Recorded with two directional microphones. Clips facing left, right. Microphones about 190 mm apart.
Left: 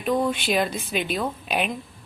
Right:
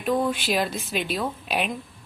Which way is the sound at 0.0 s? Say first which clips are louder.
Left 1 dB; centre (ahead or behind).